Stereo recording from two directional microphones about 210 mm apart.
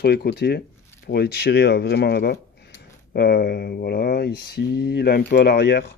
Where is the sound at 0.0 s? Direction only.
50° left (ahead or behind).